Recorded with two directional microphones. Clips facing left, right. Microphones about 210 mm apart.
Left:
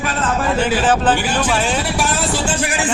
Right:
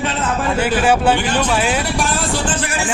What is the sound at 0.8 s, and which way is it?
Speech, 10° right (ahead or behind).